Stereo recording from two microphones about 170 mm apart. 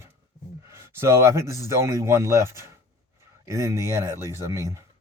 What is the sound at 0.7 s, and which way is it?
A man's voice, 15° right (ahead or behind).